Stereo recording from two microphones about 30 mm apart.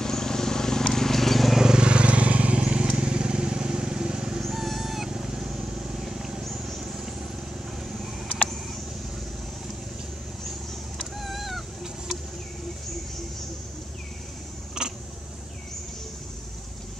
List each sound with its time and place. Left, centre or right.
0.0 s a sound: centre
0.9 s horse: centre
1.6 s vehicle: right
1.9 s vehicle: right
4.4 s cat: centre
5.1 s vehicle: right
6.0 s wild animals: centre
6.8 s vehicle: right
11.0 s a sound: centre
14.8 s a sound: right